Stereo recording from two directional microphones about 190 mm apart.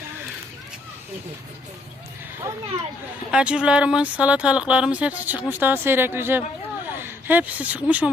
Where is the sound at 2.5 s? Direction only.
10° right (ahead or behind).